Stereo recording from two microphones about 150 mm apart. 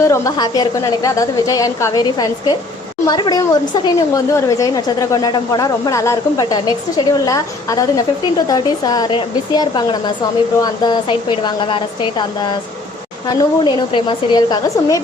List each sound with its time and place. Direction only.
0.0 s a woman's voice: 20° left (ahead or behind)